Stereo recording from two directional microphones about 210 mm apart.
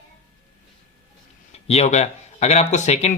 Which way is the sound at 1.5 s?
30° left (ahead or behind).